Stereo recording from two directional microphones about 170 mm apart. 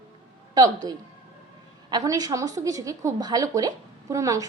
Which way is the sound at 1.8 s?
20° right (ahead or behind).